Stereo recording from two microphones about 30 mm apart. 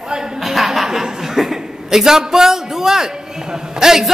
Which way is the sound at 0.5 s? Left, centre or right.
Centre.